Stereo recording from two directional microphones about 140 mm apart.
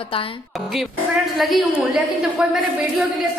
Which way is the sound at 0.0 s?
40° left (ahead or behind).